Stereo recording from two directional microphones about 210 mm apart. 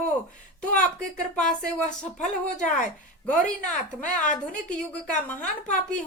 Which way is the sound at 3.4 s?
35° left (ahead or behind).